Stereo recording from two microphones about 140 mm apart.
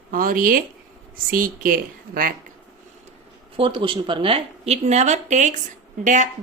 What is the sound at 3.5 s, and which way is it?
A woman's voice, 40° right (ahead or behind).